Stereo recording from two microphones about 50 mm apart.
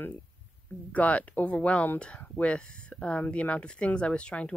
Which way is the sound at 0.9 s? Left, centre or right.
Left.